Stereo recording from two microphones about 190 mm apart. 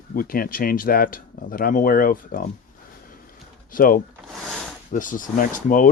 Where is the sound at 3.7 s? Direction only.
50° left (ahead or behind).